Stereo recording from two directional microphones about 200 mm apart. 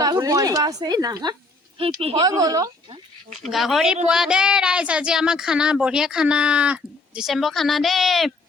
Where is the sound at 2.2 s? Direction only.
20° right (ahead or behind).